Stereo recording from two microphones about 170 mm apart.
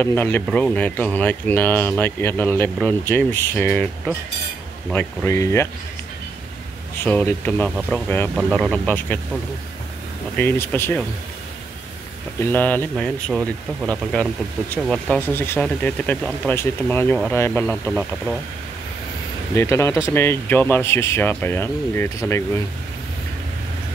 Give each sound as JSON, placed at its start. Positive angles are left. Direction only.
{"t": 0.0, "sound": "speech", "side_deg": 10}
{"t": 7.0, "sound": "speech", "side_deg": 10}
{"t": 10.3, "sound": "speech", "side_deg": 10}
{"t": 12.4, "sound": "speech", "side_deg": 10}
{"t": 19.5, "sound": "speech", "side_deg": 15}